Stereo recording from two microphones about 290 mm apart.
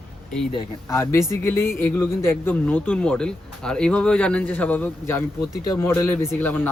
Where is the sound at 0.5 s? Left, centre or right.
Centre.